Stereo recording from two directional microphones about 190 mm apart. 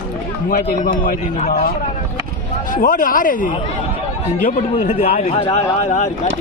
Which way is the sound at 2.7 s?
45° left (ahead or behind).